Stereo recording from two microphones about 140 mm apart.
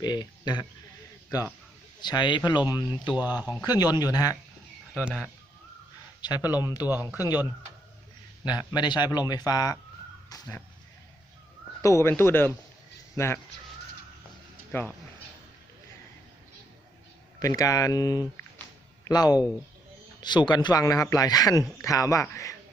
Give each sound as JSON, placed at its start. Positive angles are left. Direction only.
{"t": 0.0, "sound": "a man's voice", "side_deg": 30}
{"t": 3.2, "sound": "speech", "side_deg": -10}
{"t": 3.6, "sound": "a man's voice", "side_deg": 30}
{"t": 4.9, "sound": "speech", "side_deg": -5}
{"t": 6.2, "sound": "a man's voice", "side_deg": 30}
{"t": 6.5, "sound": "speech", "side_deg": -15}
{"t": 8.7, "sound": "a man's voice", "side_deg": 30}
{"t": 11.8, "sound": "a man's voice", "side_deg": 20}
{"t": 14.7, "sound": "speech", "side_deg": 15}
{"t": 17.4, "sound": "a man's voice", "side_deg": 25}